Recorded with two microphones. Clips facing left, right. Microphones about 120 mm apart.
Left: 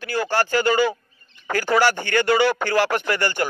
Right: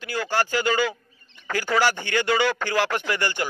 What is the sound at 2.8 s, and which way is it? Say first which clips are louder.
Speech: left 2 dB; 15° left (ahead or behind).